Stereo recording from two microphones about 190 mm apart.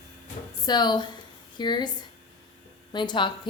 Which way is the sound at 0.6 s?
20° left (ahead or behind).